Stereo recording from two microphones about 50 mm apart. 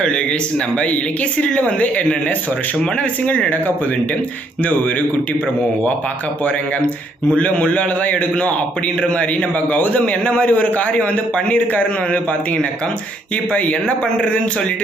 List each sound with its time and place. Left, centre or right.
1.4 s a man's voice: left
6.4 s a man's voice: left
13.5 s a man's voice: left